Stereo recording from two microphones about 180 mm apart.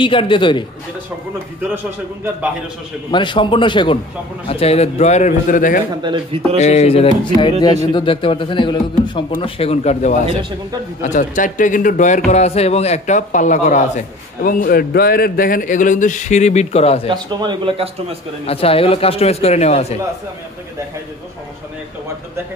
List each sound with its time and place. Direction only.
0.0 s a man's voice: 30° left (ahead or behind)
3.1 s a man's voice: 25° left (ahead or behind); by 5.8 s 45° left (ahead or behind)
6.0 s speech: 25° right (ahead or behind)
6.5 s a man's voice: 40° left (ahead or behind)
11.0 s a man's voice: 45° left (ahead or behind)
17.1 s speech: 25° right (ahead or behind)
18.5 s a man's voice: 30° left (ahead or behind)